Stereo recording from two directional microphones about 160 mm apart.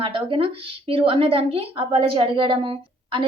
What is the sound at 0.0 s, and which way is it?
A woman's voice, 35° right (ahead or behind).